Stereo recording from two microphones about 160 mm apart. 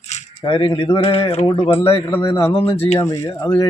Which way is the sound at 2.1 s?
15° left (ahead or behind).